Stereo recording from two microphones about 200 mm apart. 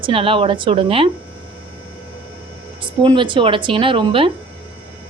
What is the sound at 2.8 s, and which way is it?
Speech, 25° right (ahead or behind).